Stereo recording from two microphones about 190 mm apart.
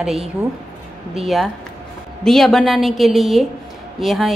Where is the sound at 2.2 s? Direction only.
Centre (ahead or behind).